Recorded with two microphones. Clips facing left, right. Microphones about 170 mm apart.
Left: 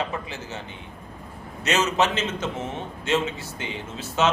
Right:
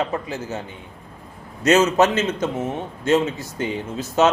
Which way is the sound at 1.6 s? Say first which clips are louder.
Right 7 dB; 40° right (ahead or behind).